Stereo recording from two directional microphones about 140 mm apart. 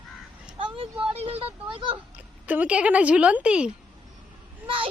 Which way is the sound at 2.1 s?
10° right (ahead or behind).